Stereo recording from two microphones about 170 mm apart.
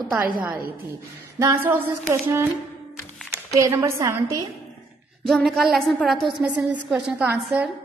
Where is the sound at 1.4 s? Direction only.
15° right (ahead or behind).